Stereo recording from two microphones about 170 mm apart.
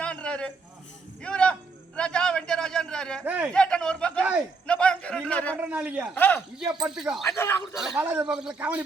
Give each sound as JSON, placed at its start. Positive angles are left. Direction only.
{"t": 0.0, "sound": "a sound", "side_deg": 5}
{"t": 3.2, "sound": "a man's voice", "side_deg": -5}
{"t": 3.5, "sound": "a man's voice", "side_deg": 5}
{"t": 5.5, "sound": "a man's voice", "side_deg": -10}
{"t": 6.1, "sound": "speech", "side_deg": 10}
{"t": 6.8, "sound": "speech", "side_deg": -5}
{"t": 7.3, "sound": "speech", "side_deg": 15}
{"t": 7.9, "sound": "a man's voice", "side_deg": -10}